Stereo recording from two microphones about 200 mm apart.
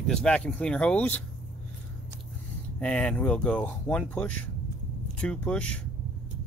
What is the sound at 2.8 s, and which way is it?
Speech, 5° left (ahead or behind).